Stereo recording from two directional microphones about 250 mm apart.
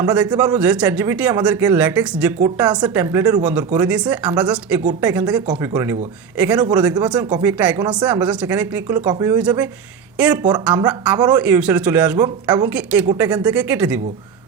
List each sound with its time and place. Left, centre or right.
0.0 s a man's voice: centre